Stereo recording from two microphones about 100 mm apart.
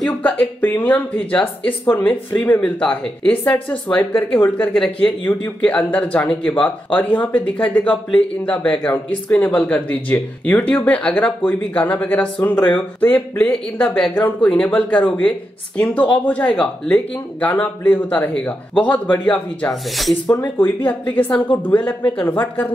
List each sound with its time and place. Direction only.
0.2 s speech: 15° left (ahead or behind)
14.1 s speech: 20° left (ahead or behind)
19.3 s speech: 5° left (ahead or behind)
20.5 s speech: 20° left (ahead or behind)